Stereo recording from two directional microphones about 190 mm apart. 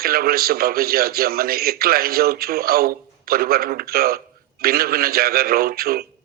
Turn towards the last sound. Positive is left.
turn(degrees=-55)  # may be behind; listen again after turning